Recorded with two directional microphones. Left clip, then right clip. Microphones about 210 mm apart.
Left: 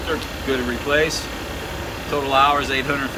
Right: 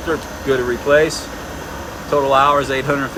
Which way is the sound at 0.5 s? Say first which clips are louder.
Right 6 dB; 45° right (ahead or behind).